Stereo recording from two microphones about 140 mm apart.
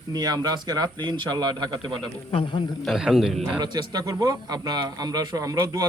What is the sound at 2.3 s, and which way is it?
Speech, 35° left (ahead or behind).